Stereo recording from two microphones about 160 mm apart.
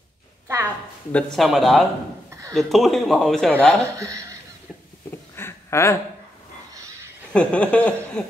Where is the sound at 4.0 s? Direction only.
20° right (ahead or behind).